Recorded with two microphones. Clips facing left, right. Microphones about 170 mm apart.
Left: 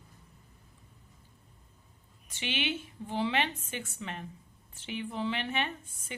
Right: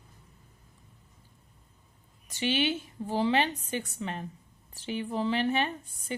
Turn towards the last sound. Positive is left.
turn(degrees=-35)  # may be behind; listen again after turning